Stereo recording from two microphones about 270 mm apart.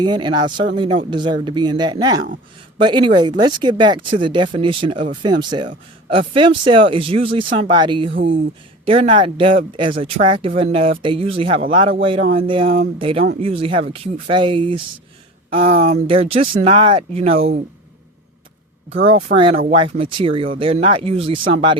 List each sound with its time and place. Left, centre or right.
0.0 s speech: centre
18.9 s speech: right